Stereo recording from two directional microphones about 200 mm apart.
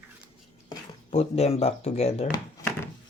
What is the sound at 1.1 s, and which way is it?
Speech, 30° left (ahead or behind).